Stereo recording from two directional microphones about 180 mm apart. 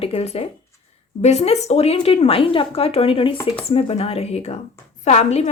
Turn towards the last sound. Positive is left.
turn(degrees=40)  # may be behind; listen again after turning